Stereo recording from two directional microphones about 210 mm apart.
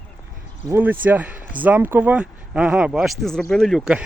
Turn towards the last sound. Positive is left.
turn(degrees=0)  # may be behind; listen again after turning